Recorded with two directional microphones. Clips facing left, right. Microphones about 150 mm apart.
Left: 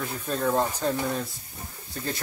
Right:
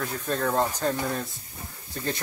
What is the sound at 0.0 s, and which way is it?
Speech, 5° left (ahead or behind).